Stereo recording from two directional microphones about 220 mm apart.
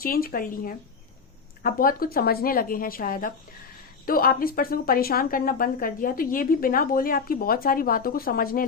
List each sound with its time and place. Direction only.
0.0 s speech: 40° left (ahead or behind)